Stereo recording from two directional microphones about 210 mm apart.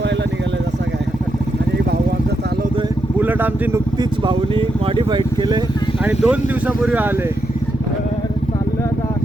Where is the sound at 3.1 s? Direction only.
10° right (ahead or behind).